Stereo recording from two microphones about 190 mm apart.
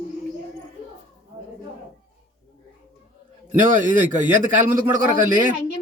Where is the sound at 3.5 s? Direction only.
45° right (ahead or behind).